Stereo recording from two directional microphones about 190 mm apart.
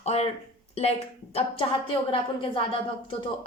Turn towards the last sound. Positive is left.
turn(degrees=30)  # may be behind; listen again after turning